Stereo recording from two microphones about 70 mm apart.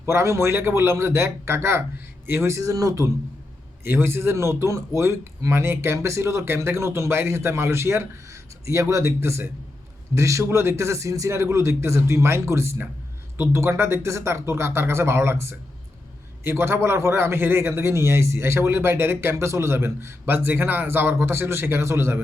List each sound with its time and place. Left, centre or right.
0.0 s a man's voice: right
2.6 s speech: right
3.8 s a man's voice: right